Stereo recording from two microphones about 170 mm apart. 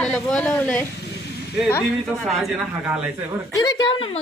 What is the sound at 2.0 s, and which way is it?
Speech, centre (ahead or behind).